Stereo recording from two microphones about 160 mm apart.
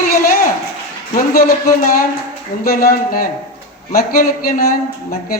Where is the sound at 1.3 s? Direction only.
65° left (ahead or behind).